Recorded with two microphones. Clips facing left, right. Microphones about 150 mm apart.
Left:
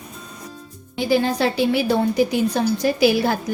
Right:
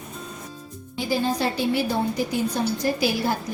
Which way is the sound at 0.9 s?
80° left.